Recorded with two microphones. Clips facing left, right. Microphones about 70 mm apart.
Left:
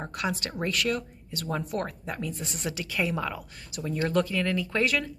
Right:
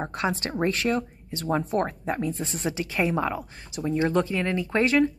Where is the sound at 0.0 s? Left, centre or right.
Right.